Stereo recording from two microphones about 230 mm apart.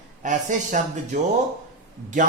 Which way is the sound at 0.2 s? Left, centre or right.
Right.